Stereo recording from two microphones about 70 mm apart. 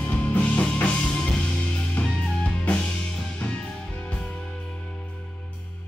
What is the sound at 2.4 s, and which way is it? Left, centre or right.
Music, centre.